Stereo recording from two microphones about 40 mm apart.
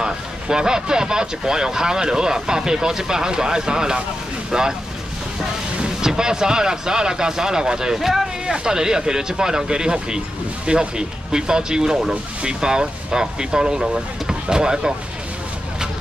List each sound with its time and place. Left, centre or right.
0.0 s speech: centre
5.8 s speech: centre